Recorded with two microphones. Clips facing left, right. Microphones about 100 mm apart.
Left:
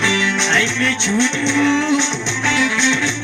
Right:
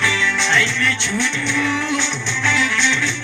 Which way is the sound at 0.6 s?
20° left (ahead or behind).